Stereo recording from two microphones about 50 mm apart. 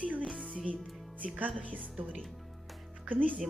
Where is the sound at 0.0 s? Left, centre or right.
Right.